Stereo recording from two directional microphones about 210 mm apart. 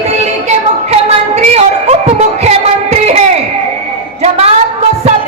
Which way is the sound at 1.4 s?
30° right (ahead or behind).